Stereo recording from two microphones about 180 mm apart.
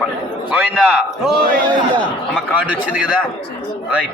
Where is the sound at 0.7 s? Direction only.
5° right (ahead or behind).